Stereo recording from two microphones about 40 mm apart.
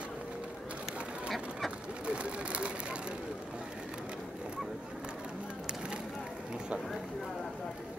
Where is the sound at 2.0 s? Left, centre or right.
Right.